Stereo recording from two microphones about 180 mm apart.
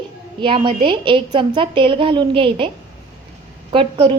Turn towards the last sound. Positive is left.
turn(degrees=-30)  # may be behind; listen again after turning